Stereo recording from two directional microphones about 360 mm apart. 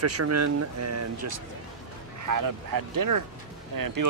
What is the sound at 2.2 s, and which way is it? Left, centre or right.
Speech, right.